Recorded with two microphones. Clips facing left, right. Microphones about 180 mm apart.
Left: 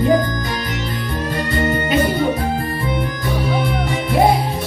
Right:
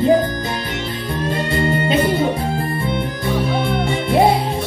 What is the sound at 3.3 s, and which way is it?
Music, 5° left (ahead or behind).